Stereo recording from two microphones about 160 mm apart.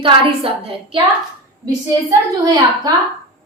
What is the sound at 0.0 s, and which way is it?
A woman's voice, 35° right (ahead or behind).